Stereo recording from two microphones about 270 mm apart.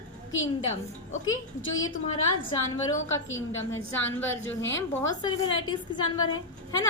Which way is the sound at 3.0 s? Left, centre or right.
Left.